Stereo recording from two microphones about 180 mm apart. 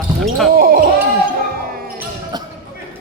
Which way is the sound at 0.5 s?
55° right (ahead or behind).